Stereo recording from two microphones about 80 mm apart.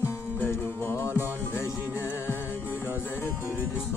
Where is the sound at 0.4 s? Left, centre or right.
Left.